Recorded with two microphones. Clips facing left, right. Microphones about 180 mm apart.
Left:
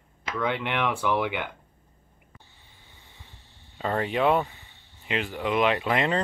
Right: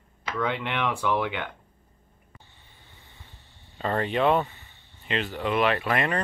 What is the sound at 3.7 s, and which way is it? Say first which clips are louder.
Speech: even; 10° left (ahead or behind).